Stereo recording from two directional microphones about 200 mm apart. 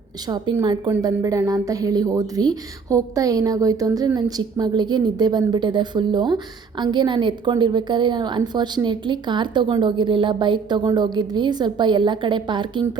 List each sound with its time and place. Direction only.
0.3 s a woman's voice: 20° right (ahead or behind)